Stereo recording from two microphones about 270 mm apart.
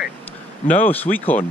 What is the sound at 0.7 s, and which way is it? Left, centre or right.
Speech, centre.